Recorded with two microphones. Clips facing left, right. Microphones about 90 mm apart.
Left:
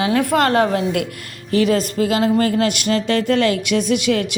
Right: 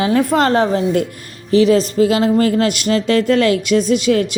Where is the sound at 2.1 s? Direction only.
40° right (ahead or behind).